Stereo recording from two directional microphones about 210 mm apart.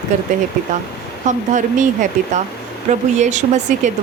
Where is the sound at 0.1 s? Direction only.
35° right (ahead or behind).